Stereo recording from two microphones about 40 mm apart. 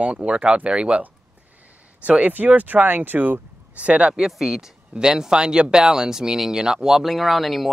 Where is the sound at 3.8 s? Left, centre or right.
Right.